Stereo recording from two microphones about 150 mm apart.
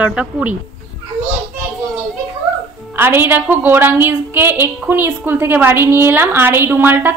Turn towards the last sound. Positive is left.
turn(degrees=-15)  # may be behind; listen again after turning